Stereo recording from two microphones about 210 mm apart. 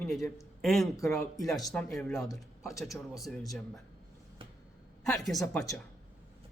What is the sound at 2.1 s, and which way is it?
Speech, 15° left (ahead or behind).